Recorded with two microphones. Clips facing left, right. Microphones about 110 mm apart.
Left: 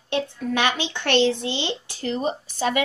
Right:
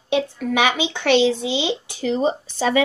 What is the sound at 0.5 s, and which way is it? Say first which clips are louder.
Speech: right 4 dB; 15° right (ahead or behind).